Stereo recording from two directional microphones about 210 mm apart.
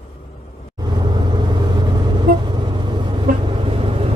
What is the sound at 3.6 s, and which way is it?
Vehicle, 25° right (ahead or behind).